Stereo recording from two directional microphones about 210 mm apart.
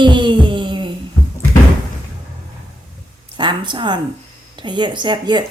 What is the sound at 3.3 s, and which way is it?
Speech, 20° right (ahead or behind).